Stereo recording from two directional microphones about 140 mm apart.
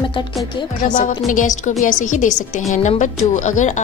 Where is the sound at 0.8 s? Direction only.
70° left (ahead or behind).